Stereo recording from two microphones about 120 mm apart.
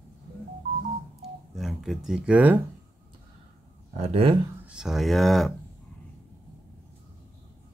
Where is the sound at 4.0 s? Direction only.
55° right (ahead or behind).